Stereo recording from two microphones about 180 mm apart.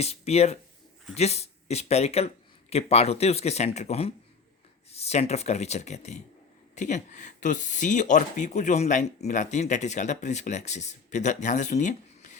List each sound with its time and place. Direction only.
0.0 s speech: 35° left (ahead or behind)